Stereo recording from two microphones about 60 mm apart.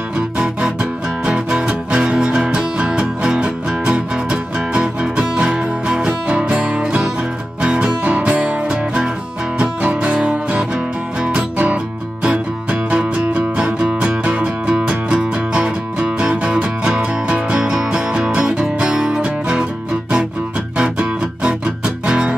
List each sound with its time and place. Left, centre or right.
0.4 s music: centre
21.0 s music: centre